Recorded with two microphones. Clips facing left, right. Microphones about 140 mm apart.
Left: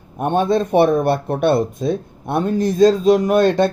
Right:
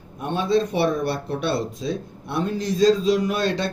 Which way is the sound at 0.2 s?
50° left (ahead or behind).